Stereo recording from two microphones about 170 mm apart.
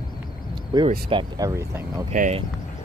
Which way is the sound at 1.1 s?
25° right (ahead or behind).